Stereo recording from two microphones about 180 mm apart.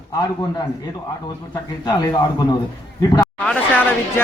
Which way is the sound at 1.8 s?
25° left (ahead or behind).